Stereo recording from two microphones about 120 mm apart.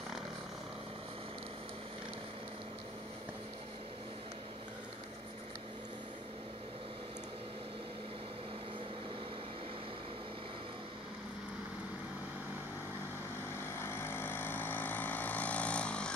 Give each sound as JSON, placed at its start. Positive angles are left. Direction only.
{"t": 13.7, "sound": "vehicle", "side_deg": 20}